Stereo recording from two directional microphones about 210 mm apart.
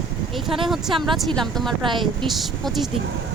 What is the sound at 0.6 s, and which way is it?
Speech, centre (ahead or behind).